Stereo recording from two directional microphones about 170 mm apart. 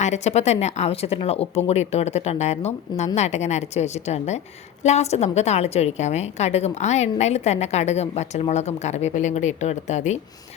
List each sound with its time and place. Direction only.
0.0 s a woman's voice: 40° left (ahead or behind)